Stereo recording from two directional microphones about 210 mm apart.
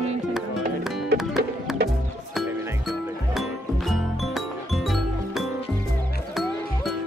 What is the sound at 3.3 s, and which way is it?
Music, centre (ahead or behind).